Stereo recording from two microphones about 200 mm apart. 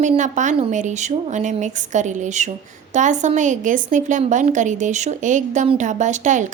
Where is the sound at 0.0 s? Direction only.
35° right (ahead or behind).